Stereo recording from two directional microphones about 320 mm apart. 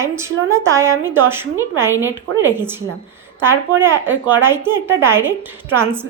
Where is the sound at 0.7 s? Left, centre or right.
Centre.